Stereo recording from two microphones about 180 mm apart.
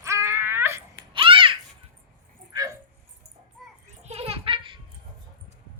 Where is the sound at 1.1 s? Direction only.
30° right (ahead or behind).